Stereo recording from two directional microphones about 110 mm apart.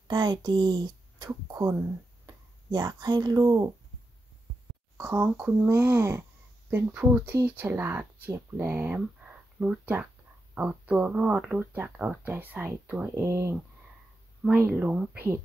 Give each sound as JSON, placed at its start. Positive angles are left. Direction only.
{"t": 0.1, "sound": "speech", "side_deg": -40}
{"t": 4.9, "sound": "speech", "side_deg": -20}
{"t": 13.1, "sound": "speech", "side_deg": -25}